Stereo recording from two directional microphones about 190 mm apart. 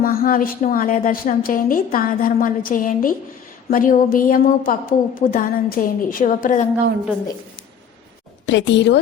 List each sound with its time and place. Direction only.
0.0 s a woman's voice: 50° left (ahead or behind)
8.4 s a woman's voice: 70° left (ahead or behind)